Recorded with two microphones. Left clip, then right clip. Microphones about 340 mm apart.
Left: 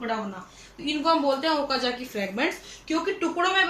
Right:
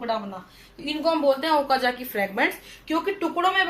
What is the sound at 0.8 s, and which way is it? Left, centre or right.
A woman's voice, centre.